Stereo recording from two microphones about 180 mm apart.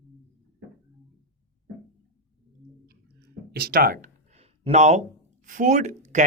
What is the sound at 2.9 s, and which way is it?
Clicking, 55° right (ahead or behind).